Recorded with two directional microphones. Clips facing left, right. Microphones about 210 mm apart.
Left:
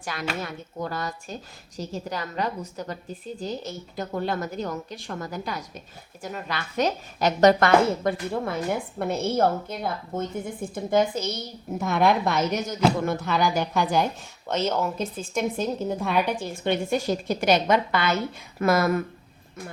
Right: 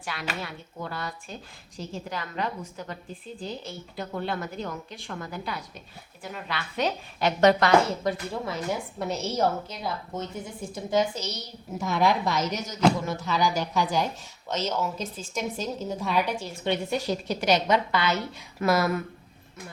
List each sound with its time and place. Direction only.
0.0 s a woman's voice: 45° left (ahead or behind)